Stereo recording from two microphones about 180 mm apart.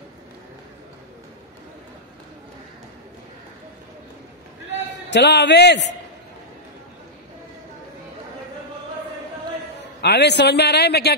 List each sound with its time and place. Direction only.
5.1 s a man's voice: 70° left (ahead or behind)
10.0 s a man's voice: 70° left (ahead or behind)